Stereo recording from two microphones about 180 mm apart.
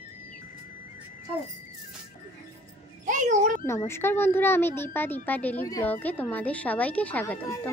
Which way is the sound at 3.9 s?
10° left (ahead or behind).